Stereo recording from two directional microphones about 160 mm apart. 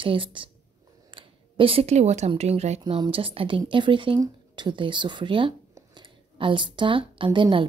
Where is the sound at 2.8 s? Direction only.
30° right (ahead or behind).